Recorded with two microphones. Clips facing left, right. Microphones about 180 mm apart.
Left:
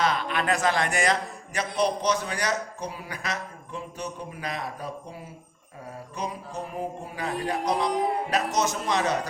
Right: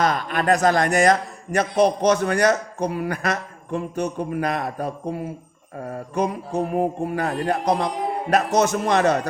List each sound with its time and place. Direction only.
0.0 s a man's voice: 45° right (ahead or behind)
5.8 s music: 55° right (ahead or behind)
8.3 s a man's voice: 55° right (ahead or behind)